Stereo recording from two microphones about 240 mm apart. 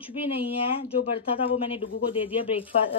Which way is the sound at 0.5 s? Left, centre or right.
Left.